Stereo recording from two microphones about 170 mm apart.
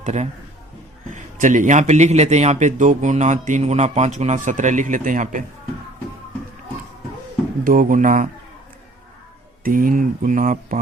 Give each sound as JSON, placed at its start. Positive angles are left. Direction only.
{"t": 0.0, "sound": "a man's voice", "side_deg": -45}
{"t": 7.6, "sound": "a man's voice", "side_deg": -55}
{"t": 9.6, "sound": "a man's voice", "side_deg": -55}